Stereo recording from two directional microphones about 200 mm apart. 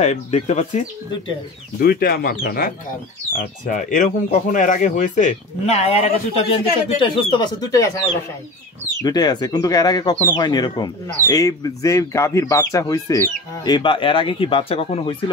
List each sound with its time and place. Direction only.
0.0 s speech: 35° left (ahead or behind)
1.8 s speech: 50° left (ahead or behind); by 7.9 s 20° left (ahead or behind)
9.0 s speech: 20° left (ahead or behind)